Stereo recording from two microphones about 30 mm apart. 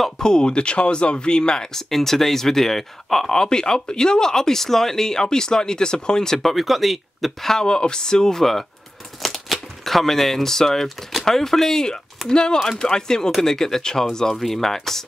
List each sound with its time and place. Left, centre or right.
0.2 s speech: left
3.3 s speech: left
6.5 s speech: centre
7.4 s speech: left
9.2 s speech: centre
12.3 s speech: left
12.5 s speech: centre